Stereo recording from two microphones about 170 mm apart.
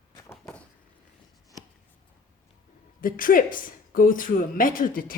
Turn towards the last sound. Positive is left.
turn(degrees=55)  # may be behind; listen again after turning